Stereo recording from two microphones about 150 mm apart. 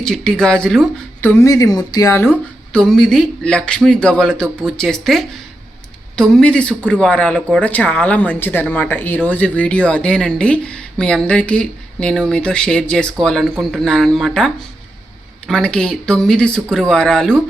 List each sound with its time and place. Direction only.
0.0 s speech: 5° left (ahead or behind)
2.7 s speech: 5° left (ahead or behind)